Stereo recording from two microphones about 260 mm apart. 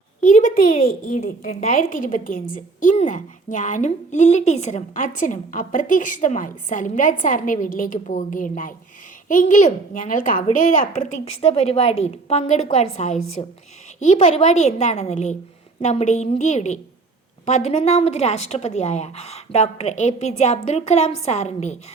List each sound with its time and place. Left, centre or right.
0.2 s a woman's voice: left